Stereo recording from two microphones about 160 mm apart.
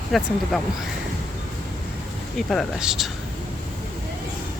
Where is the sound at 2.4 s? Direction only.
Centre (ahead or behind).